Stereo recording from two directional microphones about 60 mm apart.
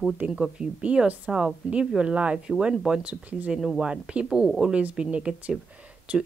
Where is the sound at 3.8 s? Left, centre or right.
Centre.